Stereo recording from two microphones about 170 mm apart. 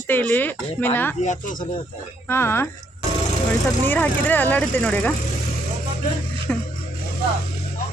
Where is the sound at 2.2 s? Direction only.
15° left (ahead or behind).